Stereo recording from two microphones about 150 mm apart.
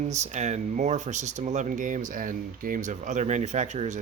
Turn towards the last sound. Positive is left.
turn(degrees=-50)  # may be behind; listen again after turning